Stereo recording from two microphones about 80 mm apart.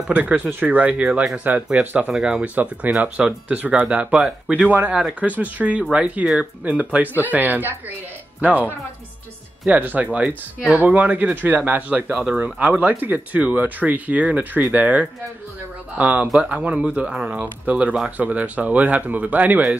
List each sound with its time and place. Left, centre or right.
0.1 s speech: centre
2.1 s speech: centre
2.4 s speech: centre